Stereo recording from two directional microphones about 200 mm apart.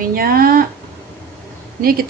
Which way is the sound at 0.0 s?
45° right (ahead or behind).